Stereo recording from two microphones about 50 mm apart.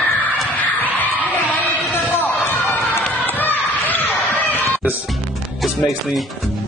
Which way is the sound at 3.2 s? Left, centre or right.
Left.